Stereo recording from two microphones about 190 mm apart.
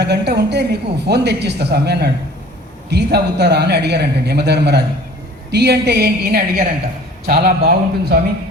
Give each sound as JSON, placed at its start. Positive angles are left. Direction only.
{"t": 0.0, "sound": "a man's voice", "side_deg": -60}